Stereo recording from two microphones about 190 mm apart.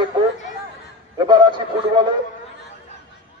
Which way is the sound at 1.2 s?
25° right (ahead or behind).